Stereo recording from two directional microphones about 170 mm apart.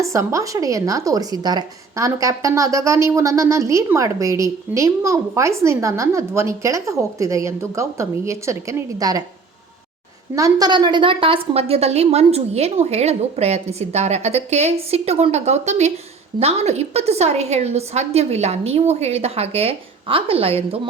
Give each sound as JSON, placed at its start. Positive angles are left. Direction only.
{"t": 0.0, "sound": "speech", "side_deg": -20}
{"t": 10.3, "sound": "a woman's voice", "side_deg": -20}